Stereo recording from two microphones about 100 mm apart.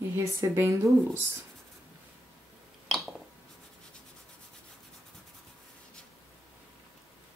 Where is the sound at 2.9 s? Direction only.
Centre (ahead or behind).